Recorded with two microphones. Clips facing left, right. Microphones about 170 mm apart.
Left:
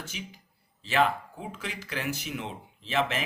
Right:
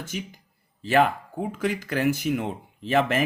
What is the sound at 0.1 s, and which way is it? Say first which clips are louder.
Speech: right 8 dB; 50° right (ahead or behind).